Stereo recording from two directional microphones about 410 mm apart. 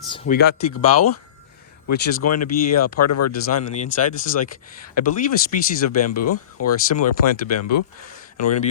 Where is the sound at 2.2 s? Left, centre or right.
Left.